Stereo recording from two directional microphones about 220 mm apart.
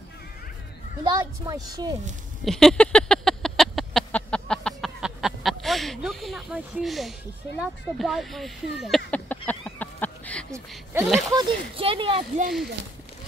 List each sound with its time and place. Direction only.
1.0 s speech: 15° right (ahead or behind)
2.4 s a sound: centre (ahead or behind)
8.0 s speech: centre (ahead or behind)
9.5 s a sound: 5° left (ahead or behind)
10.9 s speech: 10° right (ahead or behind)
11.4 s speech: 25° right (ahead or behind)